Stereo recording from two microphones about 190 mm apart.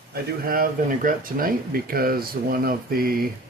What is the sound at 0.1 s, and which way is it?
Speech, 50° right (ahead or behind).